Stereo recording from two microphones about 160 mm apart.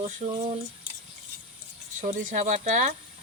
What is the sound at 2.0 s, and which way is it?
Speech, 55° right (ahead or behind).